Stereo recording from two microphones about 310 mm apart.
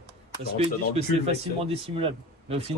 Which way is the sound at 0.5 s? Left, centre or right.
Centre.